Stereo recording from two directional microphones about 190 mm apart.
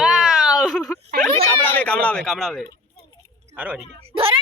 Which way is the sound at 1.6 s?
10° left (ahead or behind).